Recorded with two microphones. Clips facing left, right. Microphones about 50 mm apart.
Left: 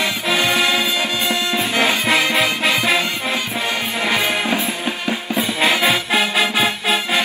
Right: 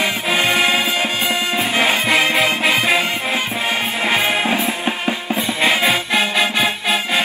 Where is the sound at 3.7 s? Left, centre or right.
Right.